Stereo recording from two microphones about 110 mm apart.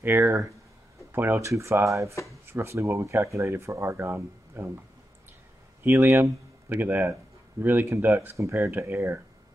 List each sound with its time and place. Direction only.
0.0 s speech: 20° right (ahead or behind)
5.9 s speech: 20° right (ahead or behind)